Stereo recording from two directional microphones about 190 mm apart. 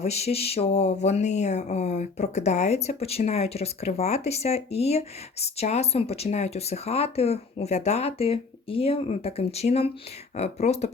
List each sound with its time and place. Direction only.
0.0 s speech: 35° left (ahead or behind)